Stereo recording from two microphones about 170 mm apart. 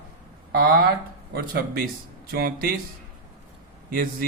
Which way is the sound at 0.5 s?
65° right (ahead or behind).